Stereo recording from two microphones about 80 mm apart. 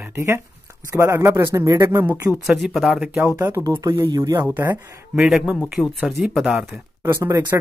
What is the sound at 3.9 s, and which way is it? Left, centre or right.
Speech, right.